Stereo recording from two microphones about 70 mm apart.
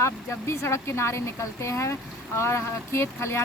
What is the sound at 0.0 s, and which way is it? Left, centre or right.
A woman's voice, left.